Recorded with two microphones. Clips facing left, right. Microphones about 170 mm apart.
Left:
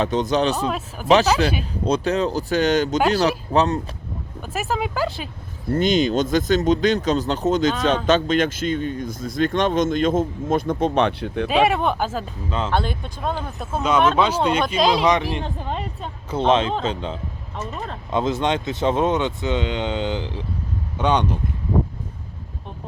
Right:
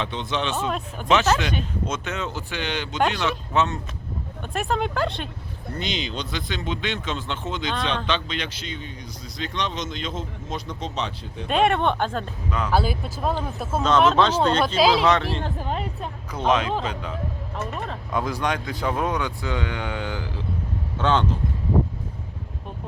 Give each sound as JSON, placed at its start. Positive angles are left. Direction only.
{"t": 0.0, "sound": "speech", "side_deg": 40}
{"t": 4.5, "sound": "speech", "side_deg": 5}
{"t": 5.7, "sound": "speech", "side_deg": 45}
{"t": 11.4, "sound": "speech", "side_deg": 5}
{"t": 12.5, "sound": "speech", "side_deg": 25}
{"t": 12.7, "sound": "speech", "side_deg": -5}
{"t": 14.1, "sound": "speech", "side_deg": 10}
{"t": 14.8, "sound": "speech", "side_deg": -5}
{"t": 15.0, "sound": "speech", "side_deg": 15}
{"t": 15.5, "sound": "speech", "side_deg": 0}
{"t": 16.3, "sound": "speech", "side_deg": 30}